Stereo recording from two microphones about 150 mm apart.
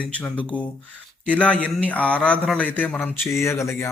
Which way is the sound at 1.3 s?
10° left (ahead or behind).